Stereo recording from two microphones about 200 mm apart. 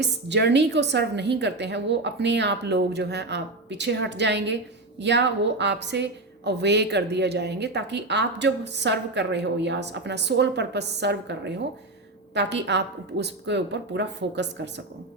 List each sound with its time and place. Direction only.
0.0 s a woman's voice: 60° right (ahead or behind)